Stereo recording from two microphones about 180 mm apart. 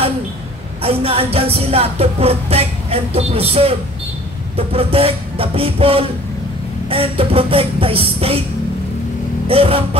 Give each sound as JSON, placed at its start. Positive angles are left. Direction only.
{"t": 0.8, "sound": "music", "side_deg": -30}
{"t": 9.5, "sound": "music", "side_deg": -30}